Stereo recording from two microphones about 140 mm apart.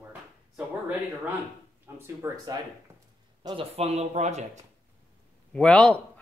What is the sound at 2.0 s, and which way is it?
Speech, 20° right (ahead or behind).